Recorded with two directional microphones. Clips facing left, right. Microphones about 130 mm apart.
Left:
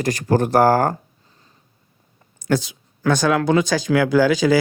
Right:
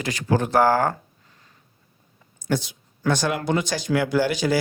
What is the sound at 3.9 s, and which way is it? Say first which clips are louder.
Speech: left 4 dB; 65° left (ahead or behind).